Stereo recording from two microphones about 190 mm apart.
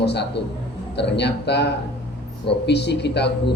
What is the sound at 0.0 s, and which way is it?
Speech, 60° left (ahead or behind).